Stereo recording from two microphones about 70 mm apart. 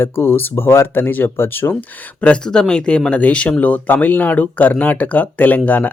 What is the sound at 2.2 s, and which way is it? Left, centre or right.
Speech, centre.